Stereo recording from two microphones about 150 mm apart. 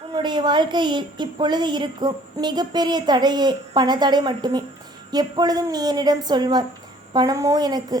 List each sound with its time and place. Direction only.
0.1 s a woman's voice: 30° right (ahead or behind)